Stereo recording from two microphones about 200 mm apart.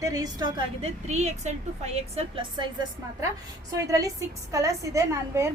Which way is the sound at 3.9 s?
15° right (ahead or behind).